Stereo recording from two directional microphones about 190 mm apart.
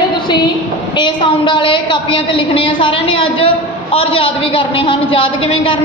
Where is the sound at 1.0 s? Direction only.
25° left (ahead or behind).